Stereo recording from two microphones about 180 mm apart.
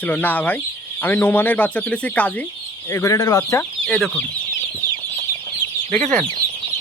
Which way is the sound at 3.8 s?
5° left (ahead or behind).